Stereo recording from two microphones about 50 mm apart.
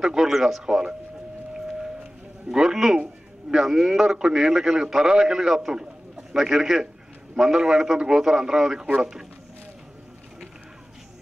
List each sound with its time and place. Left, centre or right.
0.0 s a man's voice: centre
2.4 s a man's voice: centre